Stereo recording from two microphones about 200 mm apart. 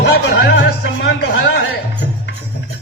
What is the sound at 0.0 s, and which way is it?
Music, 55° left (ahead or behind).